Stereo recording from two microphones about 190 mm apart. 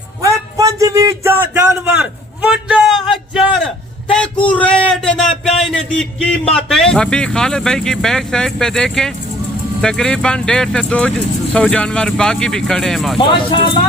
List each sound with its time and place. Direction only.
0.2 s a sound: 20° right (ahead or behind); by 6.2 s 5° left (ahead or behind)
6.5 s speech: centre (ahead or behind)
13.1 s speech: 25° left (ahead or behind)